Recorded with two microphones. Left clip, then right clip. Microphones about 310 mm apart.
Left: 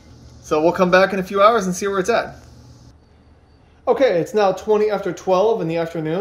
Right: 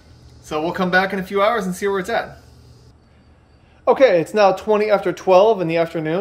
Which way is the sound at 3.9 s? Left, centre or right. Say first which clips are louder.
Right 3 dB; centre.